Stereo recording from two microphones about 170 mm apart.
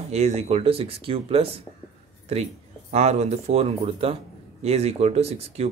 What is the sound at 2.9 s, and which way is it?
Speech, 40° right (ahead or behind).